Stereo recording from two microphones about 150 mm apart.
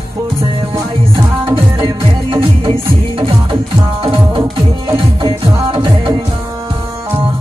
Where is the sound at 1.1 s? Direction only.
35° right (ahead or behind).